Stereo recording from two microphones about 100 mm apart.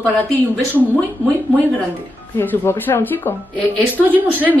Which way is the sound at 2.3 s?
20° left (ahead or behind).